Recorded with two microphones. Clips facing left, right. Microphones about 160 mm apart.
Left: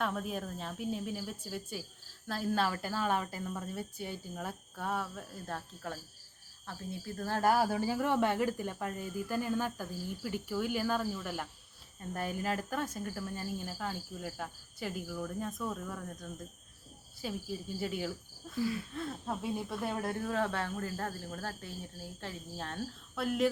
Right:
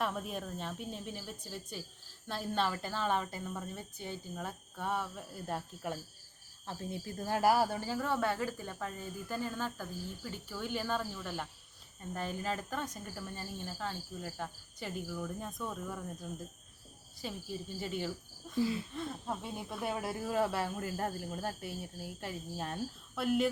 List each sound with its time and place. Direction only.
0.0 s speech: centre (ahead or behind)
5.5 s speech: 15° right (ahead or behind); by 7.8 s centre (ahead or behind)
7.9 s speech: 15° left (ahead or behind)
18.6 s a sound: 25° right (ahead or behind)
18.9 s speech: centre (ahead or behind)